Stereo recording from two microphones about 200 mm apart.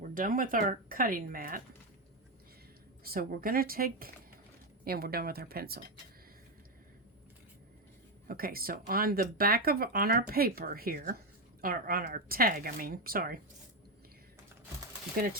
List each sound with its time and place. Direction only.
0.1 s speech: 45° right (ahead or behind)
3.0 s speech: 45° right (ahead or behind)
8.3 s speech: 45° right (ahead or behind)
15.2 s speech: 45° right (ahead or behind)